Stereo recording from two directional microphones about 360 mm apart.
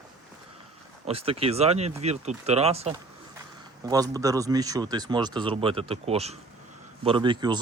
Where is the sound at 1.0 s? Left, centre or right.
Centre.